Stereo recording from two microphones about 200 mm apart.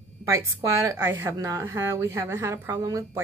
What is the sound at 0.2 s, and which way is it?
A woman's voice, 15° right (ahead or behind).